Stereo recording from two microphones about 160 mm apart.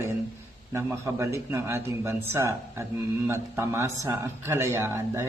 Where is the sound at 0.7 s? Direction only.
15° right (ahead or behind).